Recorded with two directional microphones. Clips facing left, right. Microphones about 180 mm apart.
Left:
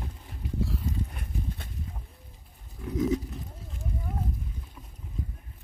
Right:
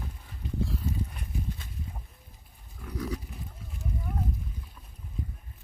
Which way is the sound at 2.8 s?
20° left (ahead or behind).